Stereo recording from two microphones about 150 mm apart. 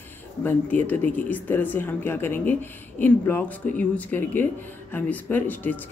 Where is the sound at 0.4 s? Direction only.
10° left (ahead or behind).